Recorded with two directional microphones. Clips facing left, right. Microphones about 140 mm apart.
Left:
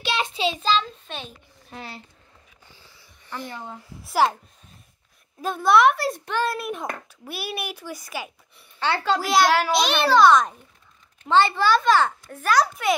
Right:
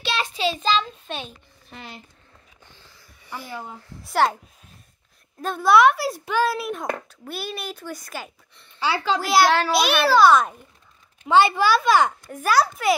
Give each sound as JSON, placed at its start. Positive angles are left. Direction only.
{"t": 0.0, "sound": "a sound", "side_deg": 15}
{"t": 0.6, "sound": "a child's voice", "side_deg": 0}
{"t": 3.3, "sound": "a child's voice", "side_deg": -5}
{"t": 5.4, "sound": "a child's voice", "side_deg": 0}
{"t": 8.7, "sound": "a child's voice", "side_deg": -5}